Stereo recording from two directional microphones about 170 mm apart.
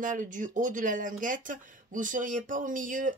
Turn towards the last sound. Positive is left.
turn(degrees=-50)  # may be behind; listen again after turning